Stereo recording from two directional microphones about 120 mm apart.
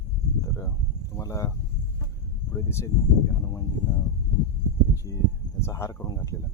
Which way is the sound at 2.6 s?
25° left (ahead or behind).